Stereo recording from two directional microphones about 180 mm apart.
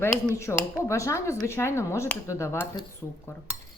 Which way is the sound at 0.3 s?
15° left (ahead or behind).